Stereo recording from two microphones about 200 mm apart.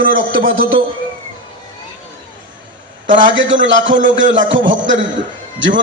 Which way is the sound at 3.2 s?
70° right (ahead or behind).